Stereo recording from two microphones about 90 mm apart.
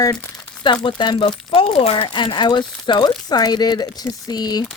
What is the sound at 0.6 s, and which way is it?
Speech, 65° left (ahead or behind).